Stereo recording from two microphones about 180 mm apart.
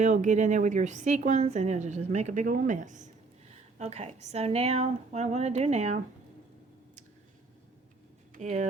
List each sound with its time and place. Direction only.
0.0 s a woman's voice: 40° right (ahead or behind)
8.4 s a woman's voice: 40° right (ahead or behind)